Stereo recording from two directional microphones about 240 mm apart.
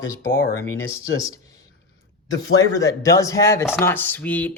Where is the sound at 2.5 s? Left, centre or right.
Centre.